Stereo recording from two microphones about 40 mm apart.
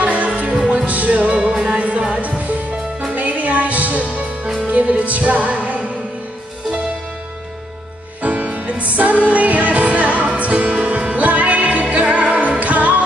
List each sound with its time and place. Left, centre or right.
0.0 s music: right
1.4 s music: right
8.2 s music: right